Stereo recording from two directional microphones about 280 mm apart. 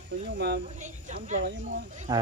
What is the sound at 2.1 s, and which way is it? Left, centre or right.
Speech, centre.